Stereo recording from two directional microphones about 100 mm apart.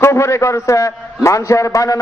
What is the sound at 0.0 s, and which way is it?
A man's voice, 25° left (ahead or behind).